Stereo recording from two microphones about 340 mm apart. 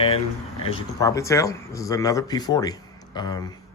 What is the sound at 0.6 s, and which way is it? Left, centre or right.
Speech, centre.